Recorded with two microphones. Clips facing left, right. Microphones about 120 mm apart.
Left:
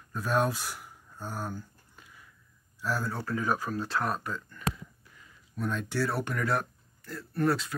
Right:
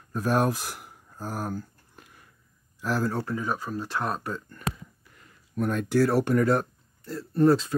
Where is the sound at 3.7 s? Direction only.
15° right (ahead or behind).